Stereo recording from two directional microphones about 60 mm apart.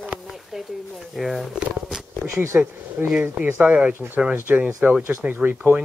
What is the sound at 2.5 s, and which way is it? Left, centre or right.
Speech, centre.